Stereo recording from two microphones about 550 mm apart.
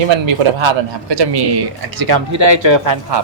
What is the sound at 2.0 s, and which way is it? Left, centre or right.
Speech, right.